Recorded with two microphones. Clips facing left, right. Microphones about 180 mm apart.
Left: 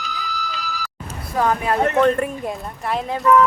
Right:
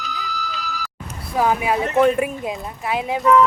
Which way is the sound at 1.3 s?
10° right (ahead or behind).